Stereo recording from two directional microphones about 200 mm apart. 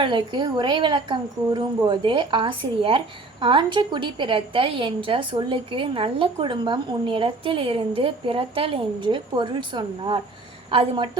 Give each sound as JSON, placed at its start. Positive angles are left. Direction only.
{"t": 0.0, "sound": "a woman's voice", "side_deg": -25}